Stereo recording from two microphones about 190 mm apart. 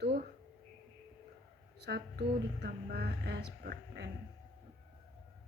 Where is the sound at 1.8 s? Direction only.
60° right (ahead or behind).